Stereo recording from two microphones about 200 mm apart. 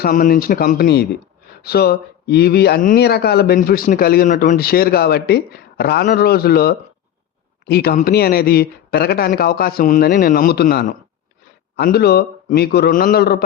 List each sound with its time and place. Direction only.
0.0 s speech: 45° left (ahead or behind)